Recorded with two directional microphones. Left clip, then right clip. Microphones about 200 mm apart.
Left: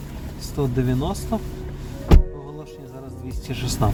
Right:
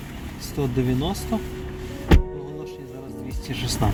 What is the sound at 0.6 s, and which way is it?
Speech, 10° right (ahead or behind).